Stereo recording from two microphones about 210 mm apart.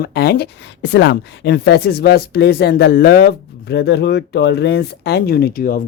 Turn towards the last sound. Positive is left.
turn(degrees=45)  # may be behind; listen again after turning